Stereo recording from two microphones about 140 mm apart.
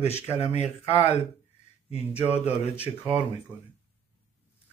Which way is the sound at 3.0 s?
10° right (ahead or behind).